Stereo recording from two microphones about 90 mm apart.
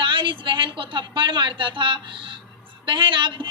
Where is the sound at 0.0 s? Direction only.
65° right (ahead or behind).